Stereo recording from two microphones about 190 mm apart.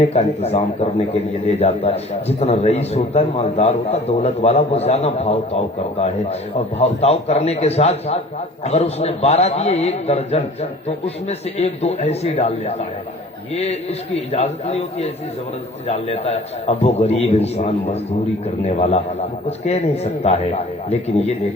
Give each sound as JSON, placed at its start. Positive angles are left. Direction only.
{"t": 0.0, "sound": "a man's voice", "side_deg": 35}
{"t": 6.7, "sound": "a man's voice", "side_deg": 35}